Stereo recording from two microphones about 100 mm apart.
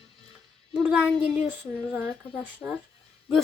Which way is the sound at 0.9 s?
10° right (ahead or behind).